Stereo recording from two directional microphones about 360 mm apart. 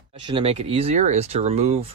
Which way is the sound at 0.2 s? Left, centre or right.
Centre.